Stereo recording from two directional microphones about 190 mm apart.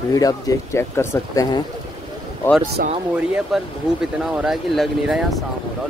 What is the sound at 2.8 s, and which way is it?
Speech, 55° right (ahead or behind).